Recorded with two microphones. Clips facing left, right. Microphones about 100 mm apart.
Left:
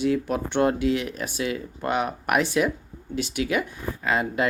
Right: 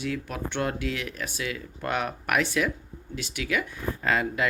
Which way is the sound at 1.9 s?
15° left (ahead or behind).